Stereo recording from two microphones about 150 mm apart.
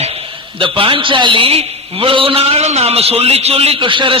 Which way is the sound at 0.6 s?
35° right (ahead or behind).